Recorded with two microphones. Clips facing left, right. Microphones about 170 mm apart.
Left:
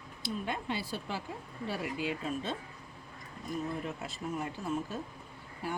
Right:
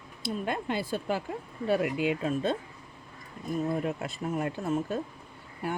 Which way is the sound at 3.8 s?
60° right (ahead or behind).